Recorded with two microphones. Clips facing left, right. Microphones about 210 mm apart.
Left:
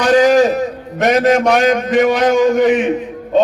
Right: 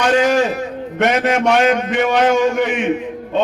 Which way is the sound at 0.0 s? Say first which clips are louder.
Left 4 dB; 35° left (ahead or behind).